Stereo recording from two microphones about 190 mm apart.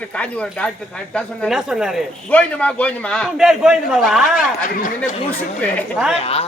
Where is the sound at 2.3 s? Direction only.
10° left (ahead or behind).